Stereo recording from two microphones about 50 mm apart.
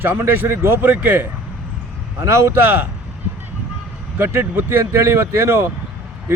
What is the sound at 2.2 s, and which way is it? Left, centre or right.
Speech, right.